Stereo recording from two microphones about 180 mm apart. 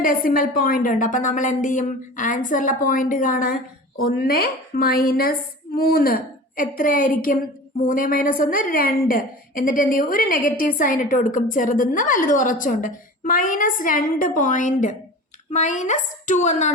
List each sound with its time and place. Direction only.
0.0 s a woman's voice: 50° left (ahead or behind)